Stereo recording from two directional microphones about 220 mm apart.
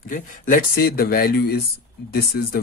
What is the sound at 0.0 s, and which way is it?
Speech, 35° left (ahead or behind).